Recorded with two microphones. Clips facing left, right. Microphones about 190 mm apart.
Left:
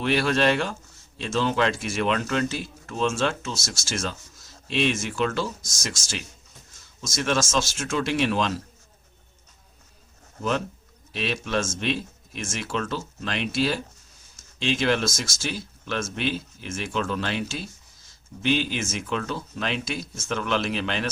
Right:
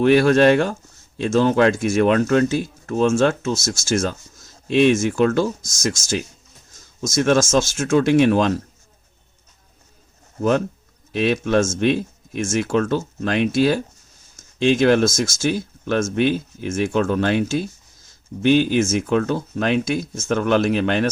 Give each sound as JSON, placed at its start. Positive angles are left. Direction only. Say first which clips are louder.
{"t": 0.0, "sound": "speech", "louder": "right 9 dB", "side_deg": -50}
{"t": 11.1, "sound": "speech", "louder": "right 9 dB", "side_deg": -50}